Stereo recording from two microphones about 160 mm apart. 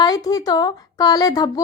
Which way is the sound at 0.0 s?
25° left (ahead or behind).